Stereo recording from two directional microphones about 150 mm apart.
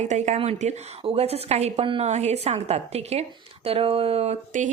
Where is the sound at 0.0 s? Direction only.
50° right (ahead or behind).